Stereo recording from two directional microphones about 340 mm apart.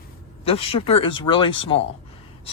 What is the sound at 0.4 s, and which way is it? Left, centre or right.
Speech, centre.